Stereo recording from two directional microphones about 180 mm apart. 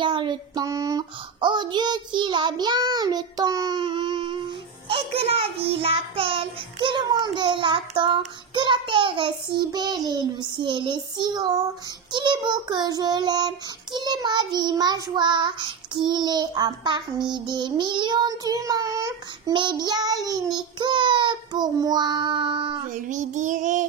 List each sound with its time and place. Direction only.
0.0 s child singing: 25° right (ahead or behind)
4.8 s a child's voice: 30° right (ahead or behind)
5.7 s child singing: 30° right (ahead or behind)
23.0 s child singing: 45° right (ahead or behind)